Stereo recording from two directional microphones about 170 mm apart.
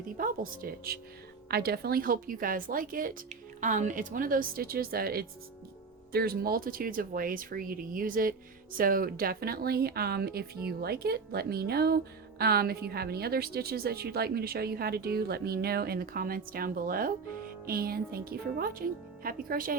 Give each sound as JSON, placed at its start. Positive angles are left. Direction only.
{"t": 0.2, "sound": "a woman's voice", "side_deg": -55}